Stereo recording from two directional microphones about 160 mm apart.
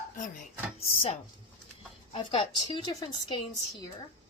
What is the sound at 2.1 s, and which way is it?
A woman's voice, 30° left (ahead or behind).